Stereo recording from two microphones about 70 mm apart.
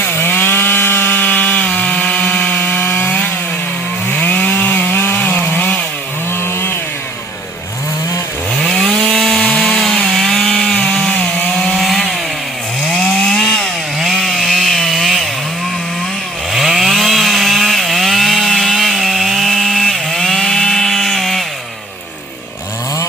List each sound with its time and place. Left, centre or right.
0.0 s wood: left
4.1 s chainsaw: left
6.3 s chainsaw: left
8.6 s chainsaw: centre
9.4 s wood: centre
11.8 s chainsaw: centre
14.0 s chainsaw: centre
16.5 s chainsaw: centre